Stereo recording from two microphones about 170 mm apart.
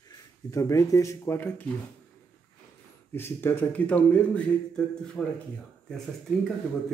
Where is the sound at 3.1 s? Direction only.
15° left (ahead or behind).